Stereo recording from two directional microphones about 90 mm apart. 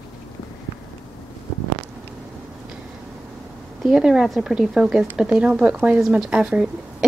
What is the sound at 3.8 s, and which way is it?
Speech, 5° right (ahead or behind).